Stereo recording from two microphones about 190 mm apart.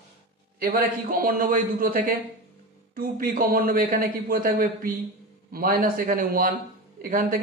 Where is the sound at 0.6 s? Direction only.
50° right (ahead or behind).